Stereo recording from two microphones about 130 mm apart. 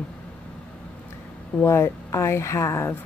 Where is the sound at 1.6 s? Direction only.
20° left (ahead or behind).